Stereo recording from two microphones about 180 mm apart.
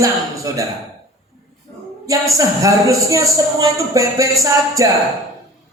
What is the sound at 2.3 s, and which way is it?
A man's voice, 20° right (ahead or behind).